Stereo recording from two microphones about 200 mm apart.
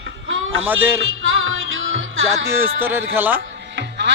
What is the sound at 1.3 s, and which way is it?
Music, 75° right (ahead or behind).